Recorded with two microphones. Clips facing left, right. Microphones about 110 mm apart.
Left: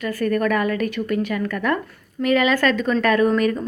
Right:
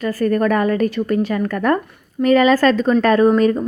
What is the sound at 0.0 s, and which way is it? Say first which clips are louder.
Speech: right 4 dB; 35° right (ahead or behind).